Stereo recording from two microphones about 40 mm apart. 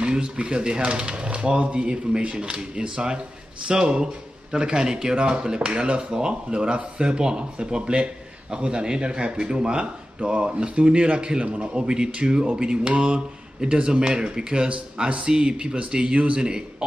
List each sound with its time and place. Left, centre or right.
0.0 s speech: right
1.1 s speech: right